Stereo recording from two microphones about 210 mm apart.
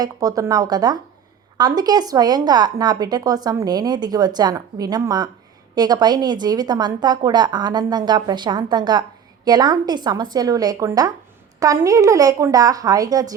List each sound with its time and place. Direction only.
0.0 s a woman's voice: 15° right (ahead or behind)